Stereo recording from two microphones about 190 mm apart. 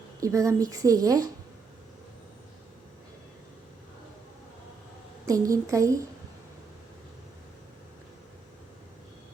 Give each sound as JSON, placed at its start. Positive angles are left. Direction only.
{"t": 0.2, "sound": "a woman's voice", "side_deg": -15}
{"t": 5.2, "sound": "a woman's voice", "side_deg": -15}